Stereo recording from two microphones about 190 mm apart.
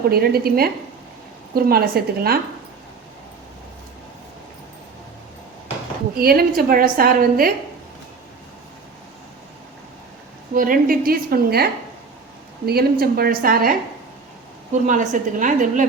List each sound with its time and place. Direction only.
0.1 s a woman's voice: 55° right (ahead or behind)
6.1 s a woman's voice: 50° right (ahead or behind)
10.5 s a woman's voice: 45° right (ahead or behind)